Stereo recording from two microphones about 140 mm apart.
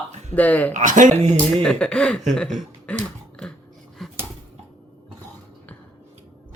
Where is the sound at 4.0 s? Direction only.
Centre (ahead or behind).